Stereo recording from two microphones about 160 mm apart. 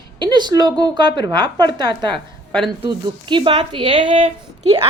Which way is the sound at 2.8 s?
30° right (ahead or behind).